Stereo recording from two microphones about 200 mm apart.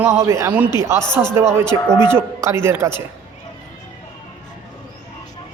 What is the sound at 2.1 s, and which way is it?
Speech, 15° right (ahead or behind).